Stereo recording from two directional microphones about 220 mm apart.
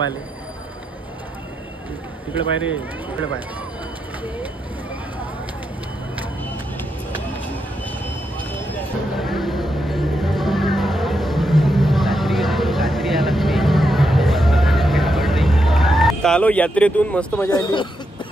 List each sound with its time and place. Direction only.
2.6 s speech: 5° right (ahead or behind)
9.2 s music: centre (ahead or behind)
17.5 s speech: 15° left (ahead or behind)